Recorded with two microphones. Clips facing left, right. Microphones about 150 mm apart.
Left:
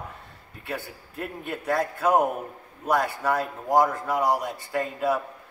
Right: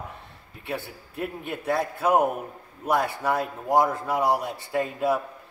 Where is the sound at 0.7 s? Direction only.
25° right (ahead or behind).